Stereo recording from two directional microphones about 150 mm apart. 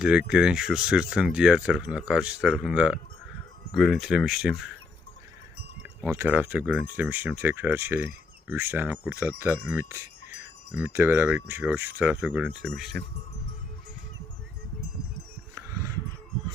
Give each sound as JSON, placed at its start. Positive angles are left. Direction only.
{"t": 0.0, "sound": "speech", "side_deg": -5}
{"t": 5.8, "sound": "speech", "side_deg": -15}
{"t": 15.5, "sound": "wild animals", "side_deg": -20}